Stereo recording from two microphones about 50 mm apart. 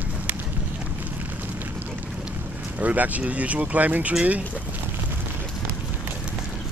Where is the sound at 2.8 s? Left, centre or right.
Right.